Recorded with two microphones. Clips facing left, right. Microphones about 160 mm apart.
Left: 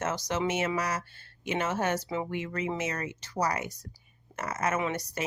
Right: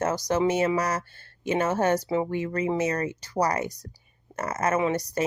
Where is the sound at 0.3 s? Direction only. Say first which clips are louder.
Right 7 dB; 40° right (ahead or behind).